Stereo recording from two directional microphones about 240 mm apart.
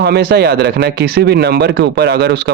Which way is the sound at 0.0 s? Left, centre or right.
Right.